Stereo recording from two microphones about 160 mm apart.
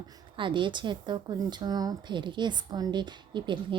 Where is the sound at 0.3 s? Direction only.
30° right (ahead or behind).